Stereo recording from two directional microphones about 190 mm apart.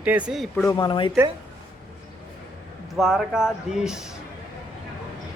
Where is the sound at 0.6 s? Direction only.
20° left (ahead or behind).